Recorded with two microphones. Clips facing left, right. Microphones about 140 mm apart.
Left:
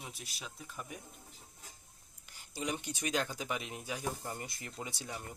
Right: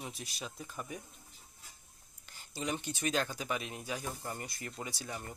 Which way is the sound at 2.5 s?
15° left (ahead or behind).